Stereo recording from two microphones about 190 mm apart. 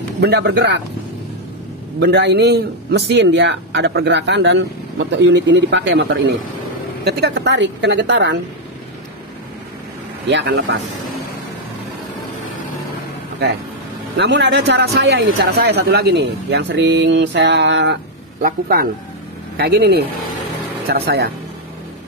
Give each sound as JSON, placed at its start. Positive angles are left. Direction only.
{"t": 0.2, "sound": "speech", "side_deg": -60}
{"t": 2.0, "sound": "speech", "side_deg": -60}
{"t": 7.1, "sound": "a woman's voice", "side_deg": -65}
{"t": 10.2, "sound": "speech", "side_deg": -65}
{"t": 14.1, "sound": "speech", "side_deg": -65}
{"t": 18.4, "sound": "a man's voice", "side_deg": -50}